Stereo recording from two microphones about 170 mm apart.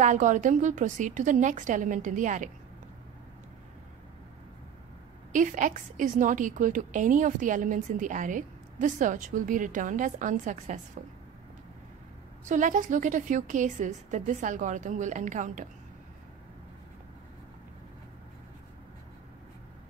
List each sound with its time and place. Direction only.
0.0 s a woman's voice: 45° right (ahead or behind)
5.3 s a woman's voice: 50° right (ahead or behind)
12.4 s a woman's voice: 50° right (ahead or behind)